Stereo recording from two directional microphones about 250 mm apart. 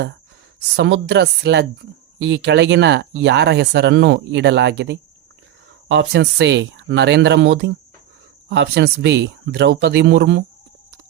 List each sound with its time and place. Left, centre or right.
0.8 s speech: right